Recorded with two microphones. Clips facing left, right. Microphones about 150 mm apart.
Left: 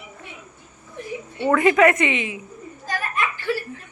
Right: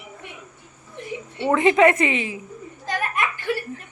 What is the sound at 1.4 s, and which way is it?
A woman's voice, 25° right (ahead or behind).